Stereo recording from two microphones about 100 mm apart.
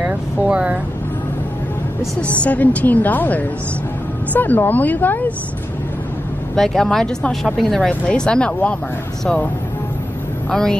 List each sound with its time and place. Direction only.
0.0 s speech: 15° right (ahead or behind)
2.2 s a woman's voice: 15° left (ahead or behind)
6.5 s a woman's voice: 5° left (ahead or behind)
10.5 s speech: 5° left (ahead or behind)